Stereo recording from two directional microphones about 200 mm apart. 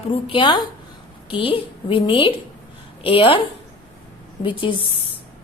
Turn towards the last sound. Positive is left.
turn(degrees=25)  # may be behind; listen again after turning